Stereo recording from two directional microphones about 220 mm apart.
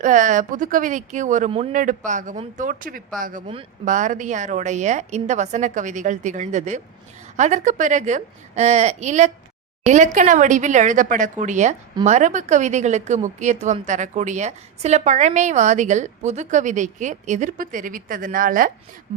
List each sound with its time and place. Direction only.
0.0 s a woman's voice: 35° right (ahead or behind)